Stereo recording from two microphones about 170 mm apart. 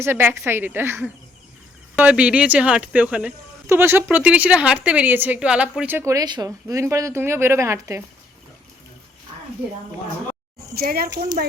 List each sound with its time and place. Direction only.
0.0 s speech: 15° right (ahead or behind)
10.8 s speech: 60° right (ahead or behind)